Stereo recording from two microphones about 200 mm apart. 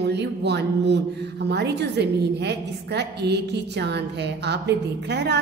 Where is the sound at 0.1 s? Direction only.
60° right (ahead or behind).